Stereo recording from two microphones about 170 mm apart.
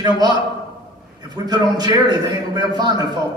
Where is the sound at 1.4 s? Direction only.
25° right (ahead or behind).